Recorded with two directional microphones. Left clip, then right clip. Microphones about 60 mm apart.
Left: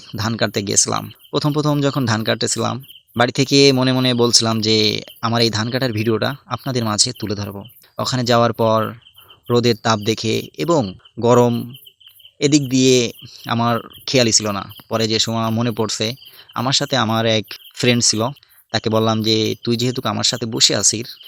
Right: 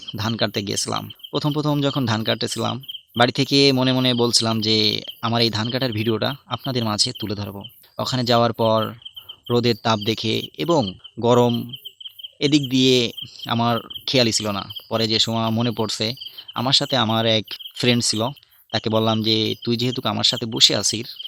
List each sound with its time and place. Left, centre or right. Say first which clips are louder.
0.2 s speech: left 3 dB; left
1.3 s speech: left 4 dB; left
3.8 s speech: left 3 dB; left
13.6 s speech: left 2 dB; centre
14.0 s speech: left 4 dB; left
15.3 s speech: left 2 dB; centre; by 21.2 s left